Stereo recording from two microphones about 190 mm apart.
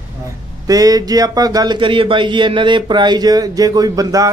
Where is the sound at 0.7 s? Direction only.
20° right (ahead or behind).